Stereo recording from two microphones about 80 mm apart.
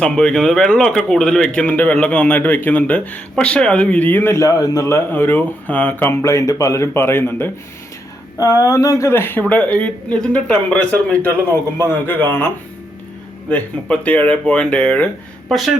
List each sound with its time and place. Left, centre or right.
0.0 s speech: centre
1.6 s speech: left
4.4 s speech: left
6.2 s speech: left
8.4 s speech: left
9.5 s speech: centre
11.9 s speech: left
13.5 s speech: centre
15.4 s a woman's voice: centre